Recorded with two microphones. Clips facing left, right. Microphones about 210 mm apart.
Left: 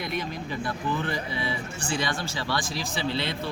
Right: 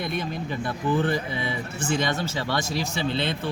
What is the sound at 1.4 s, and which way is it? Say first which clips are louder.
Speech: right 2 dB; 20° right (ahead or behind).